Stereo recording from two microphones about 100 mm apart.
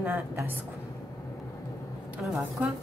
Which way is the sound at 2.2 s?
Centre (ahead or behind).